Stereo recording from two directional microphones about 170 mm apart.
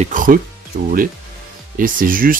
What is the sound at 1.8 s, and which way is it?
Speech, 55° right (ahead or behind).